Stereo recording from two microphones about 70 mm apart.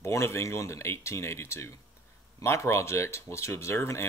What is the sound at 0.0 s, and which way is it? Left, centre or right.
Speech, left.